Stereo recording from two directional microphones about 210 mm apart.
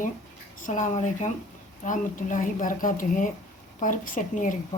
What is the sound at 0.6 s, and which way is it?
Speech, 35° left (ahead or behind).